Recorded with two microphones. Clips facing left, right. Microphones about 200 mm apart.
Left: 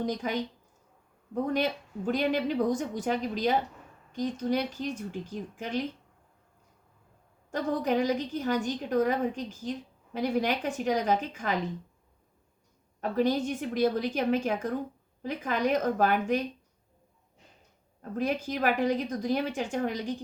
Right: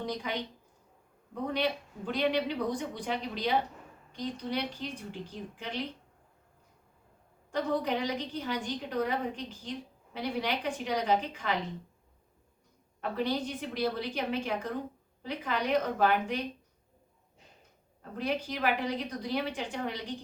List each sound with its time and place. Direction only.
0.0 s a woman's voice: 45° left (ahead or behind)
7.5 s a woman's voice: 45° left (ahead or behind)
13.0 s a woman's voice: 45° left (ahead or behind)
18.2 s a woman's voice: 45° left (ahead or behind)